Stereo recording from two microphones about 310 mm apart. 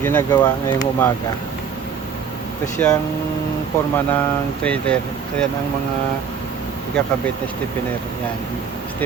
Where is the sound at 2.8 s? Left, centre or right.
Centre.